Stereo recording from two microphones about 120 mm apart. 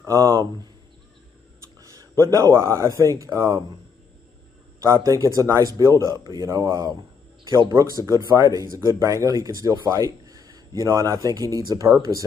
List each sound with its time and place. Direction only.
0.0 s speech: 25° right (ahead or behind)
1.8 s speech: 30° right (ahead or behind)
4.8 s speech: 30° right (ahead or behind)